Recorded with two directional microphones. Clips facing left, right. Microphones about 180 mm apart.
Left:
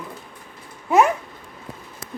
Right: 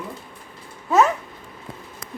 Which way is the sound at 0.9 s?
15° left (ahead or behind).